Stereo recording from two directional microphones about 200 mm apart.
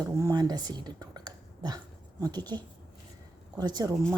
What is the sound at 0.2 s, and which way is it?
A woman's voice, 15° right (ahead or behind).